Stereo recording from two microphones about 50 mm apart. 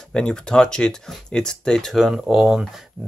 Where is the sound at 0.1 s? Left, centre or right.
Centre.